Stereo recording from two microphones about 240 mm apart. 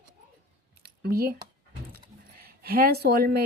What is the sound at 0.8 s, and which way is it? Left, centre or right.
Speech, right.